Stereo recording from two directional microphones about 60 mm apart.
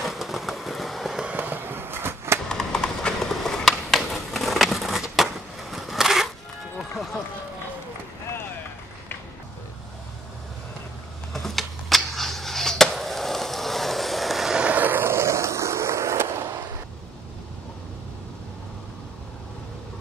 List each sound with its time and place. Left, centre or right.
0.0 s fireworks: centre
1.3 s skateboard: right
2.5 s a sound: centre
6.8 s run: centre
11.3 s a sound: centre
14.6 s fireworks: right
15.1 s skateboard: right